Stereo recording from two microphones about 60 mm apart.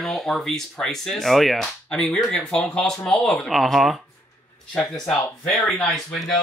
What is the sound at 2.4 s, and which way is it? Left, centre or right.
Speech, left.